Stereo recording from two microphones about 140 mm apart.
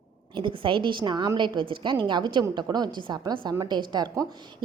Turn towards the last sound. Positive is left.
turn(degrees=-30)  # may be behind; listen again after turning